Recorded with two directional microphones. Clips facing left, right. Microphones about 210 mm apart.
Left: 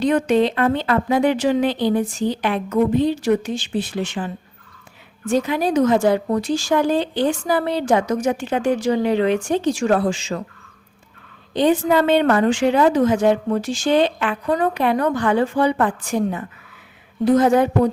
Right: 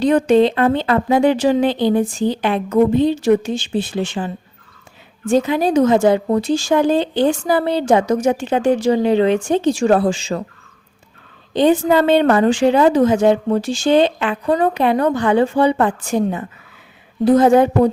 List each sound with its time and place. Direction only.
0.0 s speech: 30° right (ahead or behind)
11.5 s speech: 30° right (ahead or behind)